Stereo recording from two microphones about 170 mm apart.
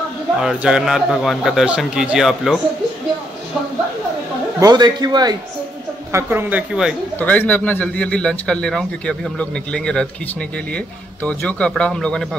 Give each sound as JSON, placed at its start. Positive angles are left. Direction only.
{"t": 0.4, "sound": "speech", "side_deg": -5}
{"t": 4.6, "sound": "a man's voice", "side_deg": -25}
{"t": 6.1, "sound": "a woman's voice", "side_deg": -10}
{"t": 7.2, "sound": "a man's voice", "side_deg": 10}
{"t": 11.2, "sound": "speech", "side_deg": 5}